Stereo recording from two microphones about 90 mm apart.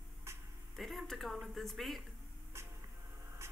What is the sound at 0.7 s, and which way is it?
A woman's voice, centre (ahead or behind).